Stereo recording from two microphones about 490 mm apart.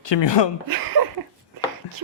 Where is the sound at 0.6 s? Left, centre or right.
Right.